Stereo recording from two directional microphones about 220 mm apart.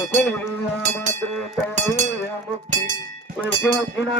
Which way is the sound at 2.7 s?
35° right (ahead or behind).